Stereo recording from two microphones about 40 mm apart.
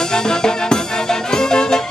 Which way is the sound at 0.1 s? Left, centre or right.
Centre.